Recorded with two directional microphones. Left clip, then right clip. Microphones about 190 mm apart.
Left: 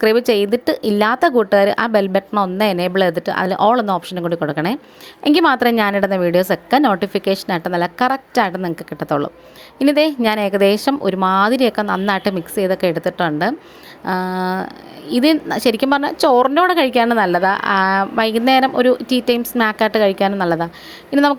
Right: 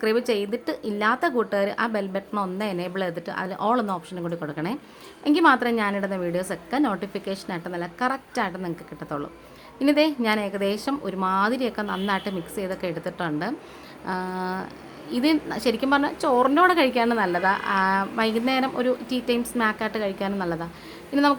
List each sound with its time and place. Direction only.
0.0 s a woman's voice: 40° left (ahead or behind)